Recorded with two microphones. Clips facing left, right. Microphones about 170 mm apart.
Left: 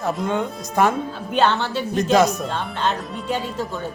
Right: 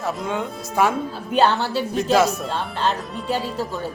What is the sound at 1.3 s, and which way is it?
Speech, 35° right (ahead or behind).